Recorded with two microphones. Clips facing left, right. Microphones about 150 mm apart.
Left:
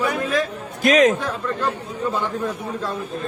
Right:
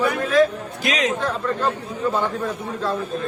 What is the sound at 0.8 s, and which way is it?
Speech, 50° left (ahead or behind).